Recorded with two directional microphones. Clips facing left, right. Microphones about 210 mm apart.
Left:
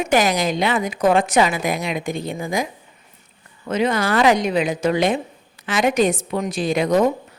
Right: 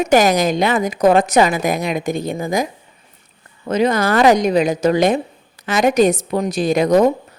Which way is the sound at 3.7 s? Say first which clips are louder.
Right 4 dB; 40° right (ahead or behind).